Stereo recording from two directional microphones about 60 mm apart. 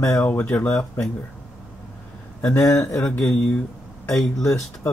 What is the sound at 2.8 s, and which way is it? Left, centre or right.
Speech, centre.